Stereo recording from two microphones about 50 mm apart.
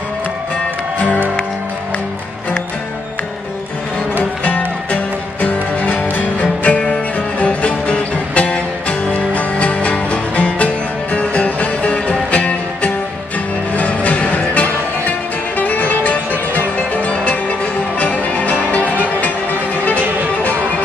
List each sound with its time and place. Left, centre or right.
0.9 s music: left
4.5 s music: left